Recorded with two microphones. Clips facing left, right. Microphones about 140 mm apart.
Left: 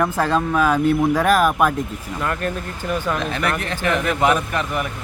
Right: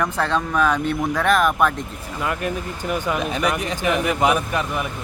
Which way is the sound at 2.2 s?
5° right (ahead or behind).